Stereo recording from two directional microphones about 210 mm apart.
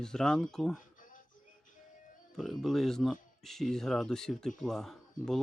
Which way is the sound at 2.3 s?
Centre (ahead or behind).